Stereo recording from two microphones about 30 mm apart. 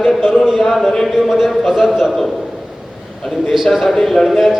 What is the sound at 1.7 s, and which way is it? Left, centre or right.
Speech, centre.